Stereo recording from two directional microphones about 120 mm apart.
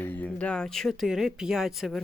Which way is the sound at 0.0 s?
10° left (ahead or behind).